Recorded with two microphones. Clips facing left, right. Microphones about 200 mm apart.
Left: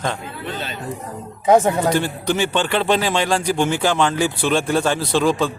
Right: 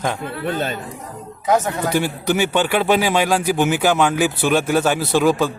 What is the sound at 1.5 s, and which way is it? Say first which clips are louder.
Speech: left 4 dB; 30° left (ahead or behind).